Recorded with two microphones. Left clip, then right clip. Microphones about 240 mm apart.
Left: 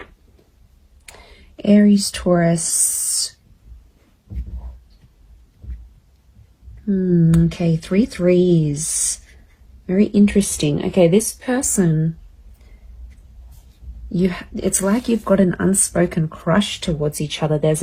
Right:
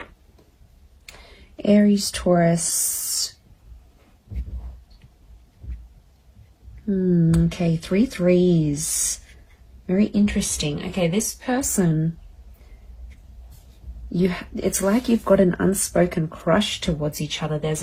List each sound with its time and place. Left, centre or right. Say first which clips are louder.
1.0 s whispering: left 2 dB; left
2.3 s speech: left 2 dB; left
2.7 s a sound: left 4 dB; left
7.1 s a woman's voice: left 5 dB; left
14.2 s speech: left 2 dB; left